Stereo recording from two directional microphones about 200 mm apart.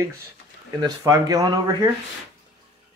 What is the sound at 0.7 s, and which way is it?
Speech, 20° right (ahead or behind).